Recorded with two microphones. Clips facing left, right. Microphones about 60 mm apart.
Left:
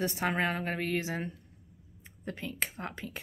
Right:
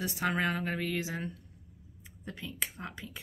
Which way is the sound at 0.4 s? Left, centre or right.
Left.